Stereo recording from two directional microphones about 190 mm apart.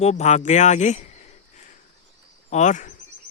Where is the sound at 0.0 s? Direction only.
35° left (ahead or behind).